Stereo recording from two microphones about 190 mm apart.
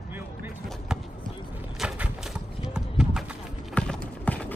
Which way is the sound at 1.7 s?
5° right (ahead or behind).